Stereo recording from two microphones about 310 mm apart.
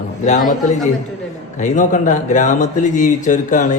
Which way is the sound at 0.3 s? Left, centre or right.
Left.